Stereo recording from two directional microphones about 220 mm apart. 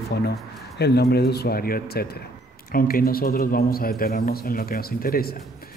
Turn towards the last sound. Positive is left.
turn(degrees=40)  # may be behind; listen again after turning